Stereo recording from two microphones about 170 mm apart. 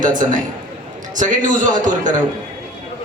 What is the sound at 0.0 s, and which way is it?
A man's voice, 50° right (ahead or behind).